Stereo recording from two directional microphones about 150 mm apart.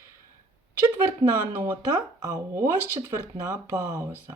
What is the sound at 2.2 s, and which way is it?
Speech, 20° right (ahead or behind).